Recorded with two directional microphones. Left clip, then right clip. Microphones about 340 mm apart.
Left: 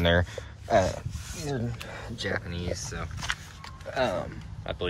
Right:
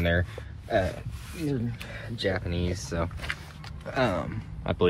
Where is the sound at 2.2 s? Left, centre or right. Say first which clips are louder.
Right 3 dB; centre.